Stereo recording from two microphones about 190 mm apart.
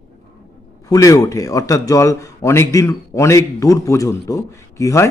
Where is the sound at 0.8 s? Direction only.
15° left (ahead or behind).